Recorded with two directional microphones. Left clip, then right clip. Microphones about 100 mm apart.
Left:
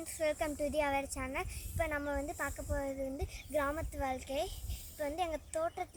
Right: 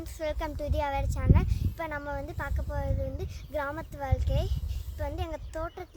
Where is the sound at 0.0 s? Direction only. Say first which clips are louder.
Right 1 dB; 25° right (ahead or behind).